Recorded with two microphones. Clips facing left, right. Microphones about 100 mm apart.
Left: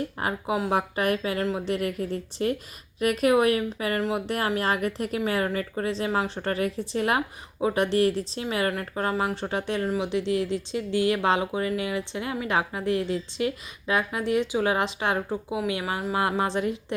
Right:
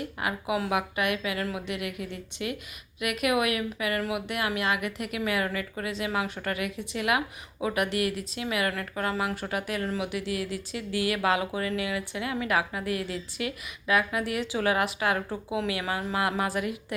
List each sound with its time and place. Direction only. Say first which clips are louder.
0.2 s a woman's voice: left 1 dB; 35° left (ahead or behind)